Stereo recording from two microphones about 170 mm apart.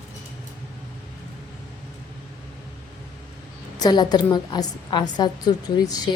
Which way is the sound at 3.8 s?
25° left (ahead or behind).